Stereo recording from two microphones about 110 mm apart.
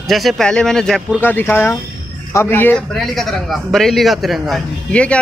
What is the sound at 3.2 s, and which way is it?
A man's voice, centre (ahead or behind).